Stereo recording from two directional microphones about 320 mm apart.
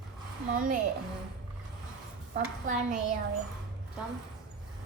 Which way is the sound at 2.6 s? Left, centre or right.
Right.